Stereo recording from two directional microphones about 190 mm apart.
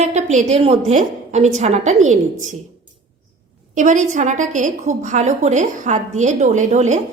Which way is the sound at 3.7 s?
40° right (ahead or behind).